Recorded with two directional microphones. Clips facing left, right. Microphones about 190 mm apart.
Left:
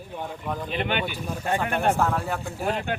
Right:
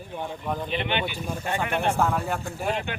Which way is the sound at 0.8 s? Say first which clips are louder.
Left 4 dB; 45° left (ahead or behind).